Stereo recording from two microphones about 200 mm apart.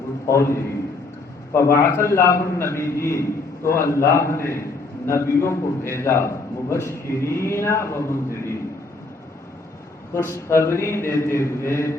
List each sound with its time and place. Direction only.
0.3 s a man's voice: 15° left (ahead or behind)
10.2 s a man's voice: 15° left (ahead or behind)